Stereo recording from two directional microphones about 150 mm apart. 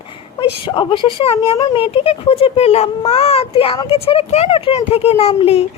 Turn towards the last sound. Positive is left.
turn(degrees=40)  # may be behind; listen again after turning